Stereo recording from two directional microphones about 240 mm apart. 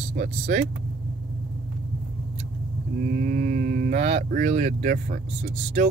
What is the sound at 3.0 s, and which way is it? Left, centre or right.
Speech, right.